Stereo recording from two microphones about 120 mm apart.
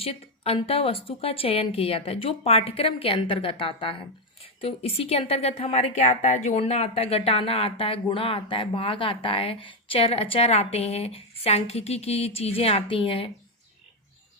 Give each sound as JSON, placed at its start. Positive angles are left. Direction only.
{"t": 0.0, "sound": "a woman's voice", "side_deg": 55}